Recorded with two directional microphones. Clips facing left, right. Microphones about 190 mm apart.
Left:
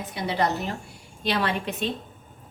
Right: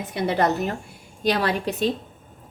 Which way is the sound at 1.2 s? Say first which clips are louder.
Right 4 dB; 40° right (ahead or behind).